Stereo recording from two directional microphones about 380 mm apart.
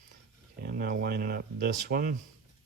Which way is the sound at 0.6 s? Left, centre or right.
Right.